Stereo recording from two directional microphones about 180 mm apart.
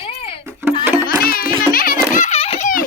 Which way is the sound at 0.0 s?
30° left (ahead or behind).